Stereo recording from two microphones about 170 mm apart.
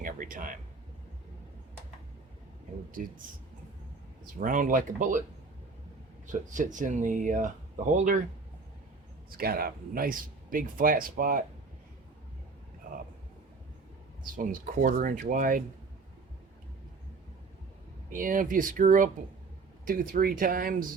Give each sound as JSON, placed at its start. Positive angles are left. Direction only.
{"t": 0.0, "sound": "a sound", "side_deg": -50}
{"t": 3.0, "sound": "speech", "side_deg": -55}
{"t": 4.4, "sound": "speech", "side_deg": -50}
{"t": 6.2, "sound": "speech", "side_deg": -50}
{"t": 9.4, "sound": "speech", "side_deg": -60}
{"t": 14.3, "sound": "speech", "side_deg": -55}
{"t": 18.1, "sound": "speech", "side_deg": -55}